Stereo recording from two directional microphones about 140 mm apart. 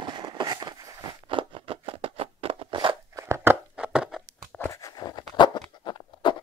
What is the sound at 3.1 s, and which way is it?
Crunch, 20° right (ahead or behind).